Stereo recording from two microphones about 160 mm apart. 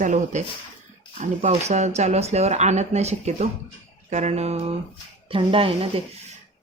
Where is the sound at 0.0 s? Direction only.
50° right (ahead or behind); by 6.0 s 35° right (ahead or behind).